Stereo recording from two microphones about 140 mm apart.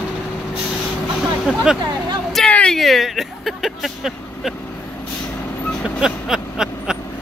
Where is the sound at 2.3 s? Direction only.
5° left (ahead or behind).